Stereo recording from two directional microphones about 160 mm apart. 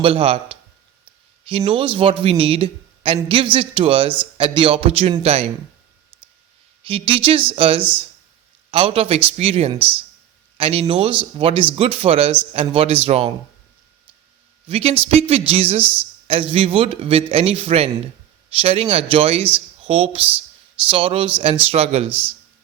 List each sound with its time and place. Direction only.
0.0 s speech: 35° right (ahead or behind)
6.8 s speech: 35° right (ahead or behind)
14.7 s speech: 35° right (ahead or behind)
15.8 s speech: 10° right (ahead or behind)
16.2 s speech: 35° right (ahead or behind)